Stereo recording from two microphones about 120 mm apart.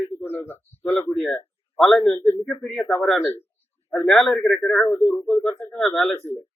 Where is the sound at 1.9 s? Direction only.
20° left (ahead or behind).